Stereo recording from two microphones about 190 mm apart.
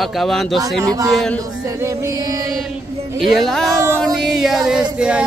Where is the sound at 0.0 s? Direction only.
Centre (ahead or behind).